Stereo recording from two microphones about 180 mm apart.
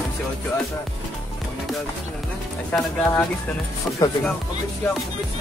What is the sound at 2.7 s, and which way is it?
Speech, 5° left (ahead or behind).